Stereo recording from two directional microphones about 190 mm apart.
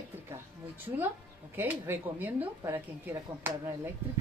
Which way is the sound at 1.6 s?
10° right (ahead or behind).